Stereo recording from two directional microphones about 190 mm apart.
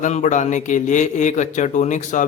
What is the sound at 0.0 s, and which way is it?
A man's voice, 40° left (ahead or behind).